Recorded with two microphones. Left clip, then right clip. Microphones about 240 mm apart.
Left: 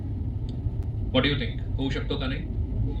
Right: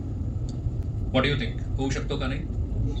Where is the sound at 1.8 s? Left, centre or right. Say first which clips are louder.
Even; right.